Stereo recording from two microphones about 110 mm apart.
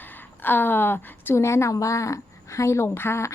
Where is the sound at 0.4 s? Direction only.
20° left (ahead or behind).